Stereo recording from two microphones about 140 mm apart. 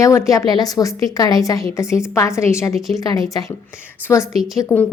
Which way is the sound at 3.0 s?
25° left (ahead or behind).